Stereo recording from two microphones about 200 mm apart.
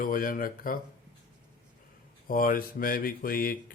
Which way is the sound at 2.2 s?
45° left (ahead or behind).